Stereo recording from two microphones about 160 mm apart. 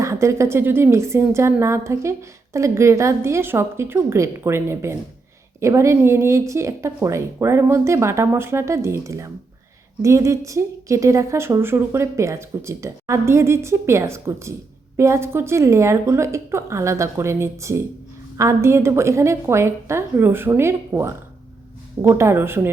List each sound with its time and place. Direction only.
0.0 s a woman's voice: 20° right (ahead or behind)